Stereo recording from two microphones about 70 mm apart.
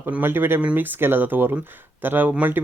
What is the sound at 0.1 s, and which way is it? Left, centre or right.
Speech, right.